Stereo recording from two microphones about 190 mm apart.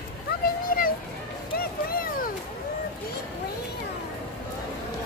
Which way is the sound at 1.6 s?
50° left (ahead or behind).